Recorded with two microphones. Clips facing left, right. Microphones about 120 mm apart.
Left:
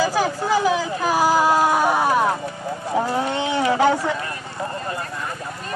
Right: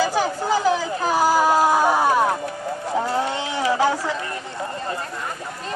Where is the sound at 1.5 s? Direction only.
10° right (ahead or behind).